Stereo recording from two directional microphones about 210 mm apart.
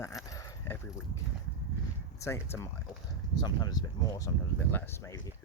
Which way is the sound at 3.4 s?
20° left (ahead or behind).